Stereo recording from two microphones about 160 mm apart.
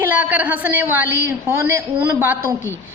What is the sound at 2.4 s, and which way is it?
Speech, 15° left (ahead or behind).